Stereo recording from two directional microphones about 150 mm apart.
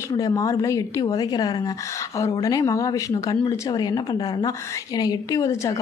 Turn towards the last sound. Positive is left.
turn(degrees=20)  # may be behind; listen again after turning